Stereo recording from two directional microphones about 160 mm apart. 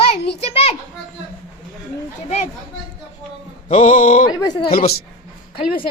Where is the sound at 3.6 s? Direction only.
40° left (ahead or behind).